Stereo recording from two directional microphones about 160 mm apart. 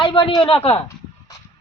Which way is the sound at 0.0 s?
35° left (ahead or behind).